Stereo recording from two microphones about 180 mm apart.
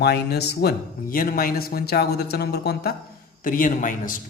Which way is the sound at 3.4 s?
50° left (ahead or behind).